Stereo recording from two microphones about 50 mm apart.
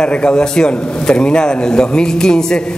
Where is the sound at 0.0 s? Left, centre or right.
Left.